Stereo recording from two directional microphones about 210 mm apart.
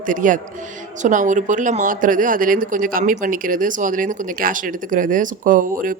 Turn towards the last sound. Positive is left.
turn(degrees=-40)  # may be behind; listen again after turning